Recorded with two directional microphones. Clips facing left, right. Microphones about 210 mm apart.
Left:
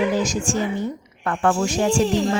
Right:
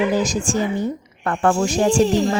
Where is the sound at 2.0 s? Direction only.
Centre (ahead or behind).